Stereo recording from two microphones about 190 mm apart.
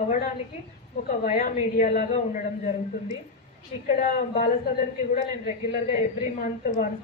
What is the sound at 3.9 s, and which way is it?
A woman's voice, 45° left (ahead or behind).